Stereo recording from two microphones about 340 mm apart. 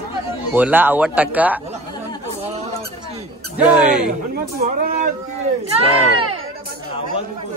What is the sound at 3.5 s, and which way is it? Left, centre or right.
Speech, centre.